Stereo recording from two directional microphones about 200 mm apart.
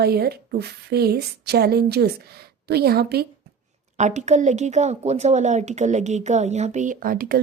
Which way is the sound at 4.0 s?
35° right (ahead or behind).